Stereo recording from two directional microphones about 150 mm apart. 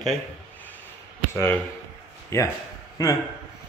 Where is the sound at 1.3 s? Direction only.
15° left (ahead or behind).